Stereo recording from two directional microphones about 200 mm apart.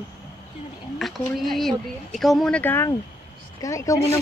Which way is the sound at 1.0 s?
Centre (ahead or behind).